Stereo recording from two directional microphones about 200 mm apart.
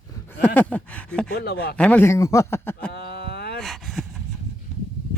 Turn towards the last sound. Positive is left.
turn(degrees=0)  # may be behind; listen again after turning